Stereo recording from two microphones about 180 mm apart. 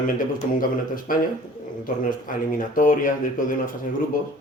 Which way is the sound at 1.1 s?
50° left (ahead or behind).